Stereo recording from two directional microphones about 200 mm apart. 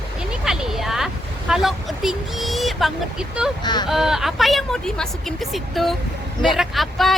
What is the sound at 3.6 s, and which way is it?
Speech, 20° left (ahead or behind).